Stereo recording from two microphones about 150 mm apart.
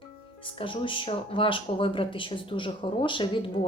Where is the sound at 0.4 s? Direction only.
35° left (ahead or behind).